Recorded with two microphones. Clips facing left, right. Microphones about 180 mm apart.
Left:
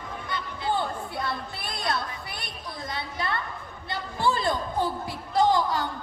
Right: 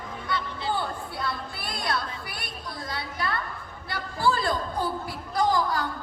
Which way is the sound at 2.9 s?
20° left (ahead or behind).